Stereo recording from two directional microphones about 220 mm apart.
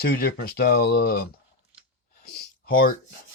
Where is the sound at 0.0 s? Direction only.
45° left (ahead or behind).